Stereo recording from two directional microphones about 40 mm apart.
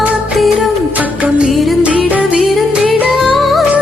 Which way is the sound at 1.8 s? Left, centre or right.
Right.